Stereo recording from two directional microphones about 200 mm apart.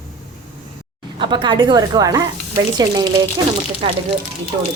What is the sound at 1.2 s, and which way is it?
A woman's voice, 25° right (ahead or behind).